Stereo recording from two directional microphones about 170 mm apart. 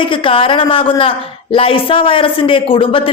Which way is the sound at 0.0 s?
30° left (ahead or behind).